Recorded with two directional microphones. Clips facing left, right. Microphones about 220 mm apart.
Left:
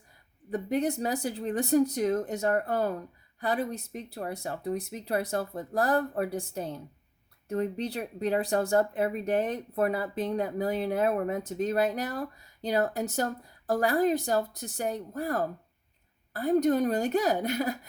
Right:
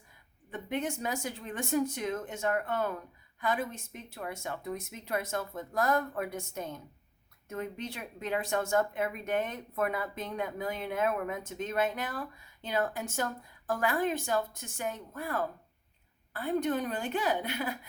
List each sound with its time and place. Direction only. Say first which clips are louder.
0.5 s speech: left 6 dB; 35° left (ahead or behind)